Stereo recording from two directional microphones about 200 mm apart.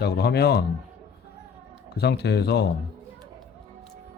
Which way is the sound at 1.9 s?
55° left (ahead or behind).